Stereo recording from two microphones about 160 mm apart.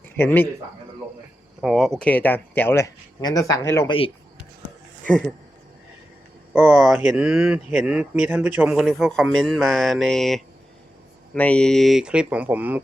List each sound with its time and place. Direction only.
0.2 s speech: 15° left (ahead or behind)
1.6 s speech: centre (ahead or behind); by 3.8 s 15° left (ahead or behind)
3.8 s speech: 35° left (ahead or behind)
5.0 s speech: 10° left (ahead or behind)
6.5 s speech: 10° right (ahead or behind)